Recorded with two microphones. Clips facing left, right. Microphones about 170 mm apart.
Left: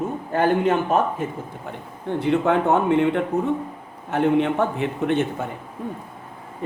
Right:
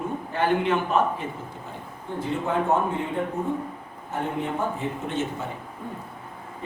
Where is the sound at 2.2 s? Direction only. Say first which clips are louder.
Left 6 dB; 70° left (ahead or behind).